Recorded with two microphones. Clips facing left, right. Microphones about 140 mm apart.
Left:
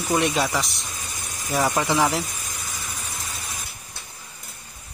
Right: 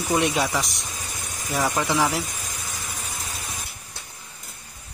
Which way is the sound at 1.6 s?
10° left (ahead or behind).